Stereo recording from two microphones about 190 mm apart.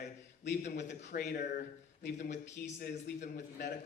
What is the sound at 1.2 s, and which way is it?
Speech, 60° left (ahead or behind).